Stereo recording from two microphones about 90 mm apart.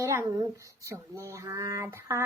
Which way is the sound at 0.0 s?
30° right (ahead or behind).